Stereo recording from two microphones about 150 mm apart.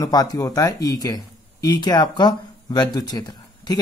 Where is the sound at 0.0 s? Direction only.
25° left (ahead or behind).